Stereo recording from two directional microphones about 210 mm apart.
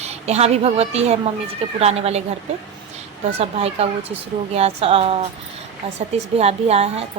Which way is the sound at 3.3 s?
30° right (ahead or behind).